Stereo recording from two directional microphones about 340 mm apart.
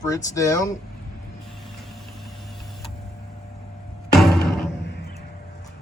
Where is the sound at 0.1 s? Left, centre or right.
Centre.